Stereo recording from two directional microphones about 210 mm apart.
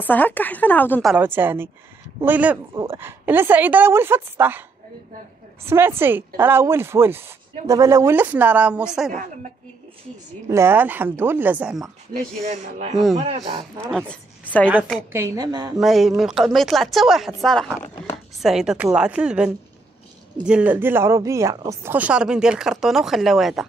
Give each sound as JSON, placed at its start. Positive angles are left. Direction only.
{"t": 0.0, "sound": "speech", "side_deg": 10}
{"t": 1.1, "sound": "a woman's voice", "side_deg": -10}
{"t": 5.7, "sound": "a woman's voice", "side_deg": -10}
{"t": 10.5, "sound": "a woman's voice", "side_deg": -10}
{"t": 12.4, "sound": "speech", "side_deg": -35}
{"t": 13.8, "sound": "a woman's voice", "side_deg": 5}
{"t": 15.1, "sound": "a woman's voice", "side_deg": -15}
{"t": 15.8, "sound": "speech", "side_deg": 0}